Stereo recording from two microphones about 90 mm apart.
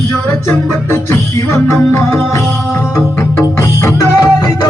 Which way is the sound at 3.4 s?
35° left (ahead or behind).